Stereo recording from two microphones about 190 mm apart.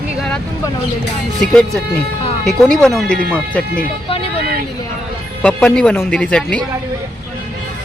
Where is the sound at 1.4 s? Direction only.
Centre (ahead or behind).